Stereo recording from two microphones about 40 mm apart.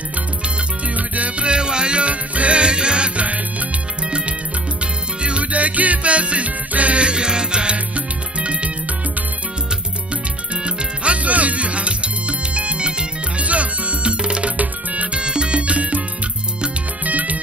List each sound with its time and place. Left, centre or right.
0.9 s music: right
7.7 s music: right
10.5 s music: right
14.6 s music: right
15.1 s music: right
17.0 s music: right